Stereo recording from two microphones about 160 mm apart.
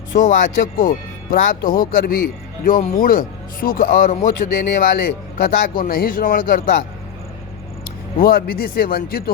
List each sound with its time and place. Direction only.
0.2 s speech: 55° left (ahead or behind)
8.2 s speech: 70° left (ahead or behind)